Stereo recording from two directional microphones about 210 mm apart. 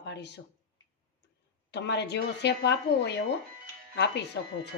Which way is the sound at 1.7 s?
55° left (ahead or behind).